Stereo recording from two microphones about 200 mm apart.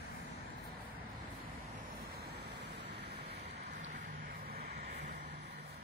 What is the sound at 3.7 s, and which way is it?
Vehicle, 35° right (ahead or behind).